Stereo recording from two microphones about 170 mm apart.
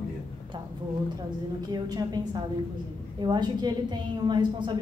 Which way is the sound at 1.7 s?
25° right (ahead or behind).